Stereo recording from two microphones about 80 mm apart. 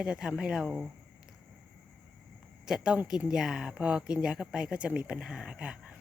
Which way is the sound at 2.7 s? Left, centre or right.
Centre.